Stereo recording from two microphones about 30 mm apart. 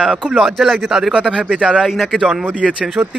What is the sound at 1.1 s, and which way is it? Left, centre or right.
Speech, right.